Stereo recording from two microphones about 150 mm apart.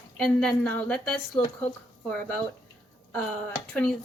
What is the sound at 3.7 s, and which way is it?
Speech, 5° left (ahead or behind).